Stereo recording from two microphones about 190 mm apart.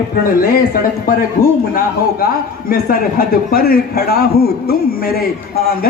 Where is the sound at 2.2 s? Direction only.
50° left (ahead or behind).